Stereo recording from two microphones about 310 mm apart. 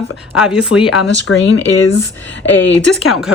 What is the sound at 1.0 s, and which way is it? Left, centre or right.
Speech, left.